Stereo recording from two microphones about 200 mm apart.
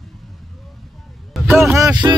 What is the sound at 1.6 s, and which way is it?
Speech, 15° right (ahead or behind).